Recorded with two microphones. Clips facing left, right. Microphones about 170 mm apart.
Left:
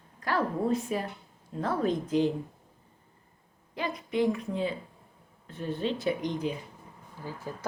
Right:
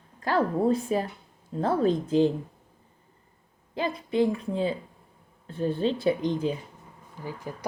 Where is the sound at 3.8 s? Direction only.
30° right (ahead or behind).